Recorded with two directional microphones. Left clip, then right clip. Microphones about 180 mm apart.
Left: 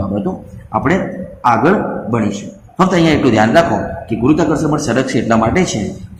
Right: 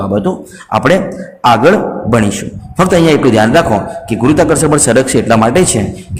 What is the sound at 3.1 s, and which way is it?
Speech, 40° right (ahead or behind).